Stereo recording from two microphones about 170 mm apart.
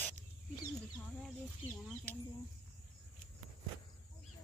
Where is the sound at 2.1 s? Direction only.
10° left (ahead or behind).